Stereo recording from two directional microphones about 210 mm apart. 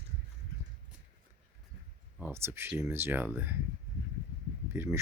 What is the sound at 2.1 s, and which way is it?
Speech, 10° right (ahead or behind).